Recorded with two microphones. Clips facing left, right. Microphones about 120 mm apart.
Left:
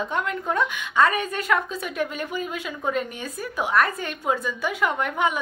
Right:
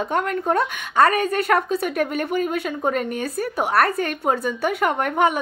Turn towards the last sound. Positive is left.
turn(degrees=-55)  # may be behind; listen again after turning